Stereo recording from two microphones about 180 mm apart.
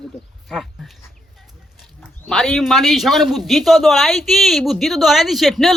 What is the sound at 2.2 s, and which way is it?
Speech, centre (ahead or behind).